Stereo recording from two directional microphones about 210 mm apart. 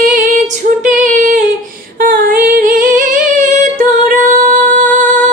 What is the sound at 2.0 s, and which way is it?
Female singing, 45° right (ahead or behind).